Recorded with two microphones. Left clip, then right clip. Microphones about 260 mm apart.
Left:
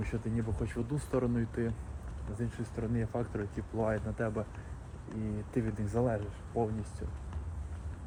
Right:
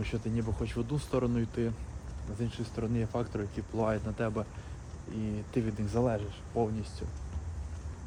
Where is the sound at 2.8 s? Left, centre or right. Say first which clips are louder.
Right 2 dB; centre.